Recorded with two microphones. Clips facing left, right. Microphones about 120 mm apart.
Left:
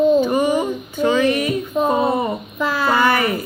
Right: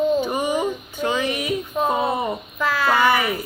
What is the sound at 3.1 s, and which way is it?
Speech, 10° right (ahead or behind).